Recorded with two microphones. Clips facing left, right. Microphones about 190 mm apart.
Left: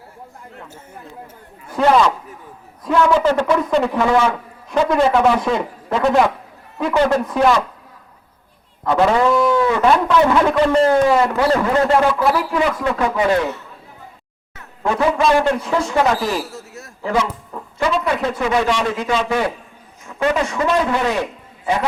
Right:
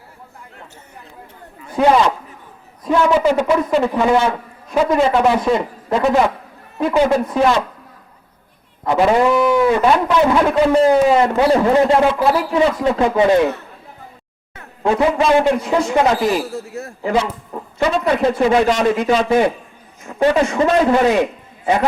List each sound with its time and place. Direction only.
1.7 s a man's voice: 15° right (ahead or behind)
8.8 s a man's voice: 15° right (ahead or behind)
11.1 s a man's voice: 20° right (ahead or behind)
14.5 s a man's voice: 25° right (ahead or behind)
19.3 s a man's voice: 25° right (ahead or behind)
20.1 s a man's voice: 35° right (ahead or behind)